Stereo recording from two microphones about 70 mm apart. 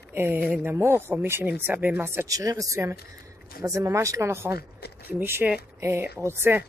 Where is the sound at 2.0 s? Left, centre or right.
Right.